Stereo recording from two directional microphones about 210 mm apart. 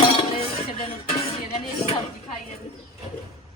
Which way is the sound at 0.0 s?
25° left (ahead or behind).